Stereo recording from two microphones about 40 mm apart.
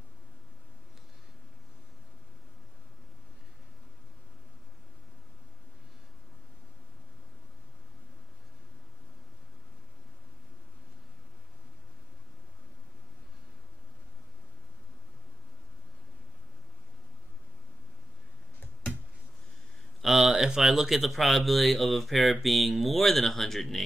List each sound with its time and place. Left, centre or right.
20.0 s speech: centre